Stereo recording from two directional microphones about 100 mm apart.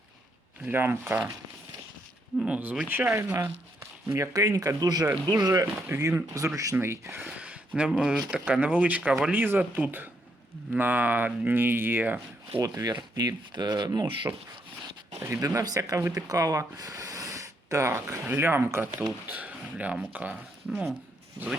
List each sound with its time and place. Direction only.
0.6 s speech: 20° right (ahead or behind)
2.4 s speech: 15° right (ahead or behind)
4.0 s speech: 30° right (ahead or behind)
7.3 s a sound: 10° right (ahead or behind)
7.9 s speech: 5° right (ahead or behind)
12.6 s speech: 35° right (ahead or behind)
15.1 s speech: 30° right (ahead or behind); by 20.3 s 15° right (ahead or behind)
20.7 s speech: 5° right (ahead or behind)